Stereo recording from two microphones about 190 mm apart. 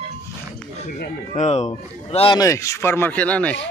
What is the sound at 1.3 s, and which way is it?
A man's voice, 35° left (ahead or behind).